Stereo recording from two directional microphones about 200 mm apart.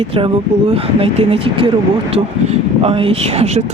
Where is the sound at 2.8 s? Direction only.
30° right (ahead or behind).